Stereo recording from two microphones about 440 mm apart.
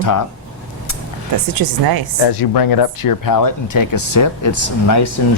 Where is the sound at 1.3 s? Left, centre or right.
Right.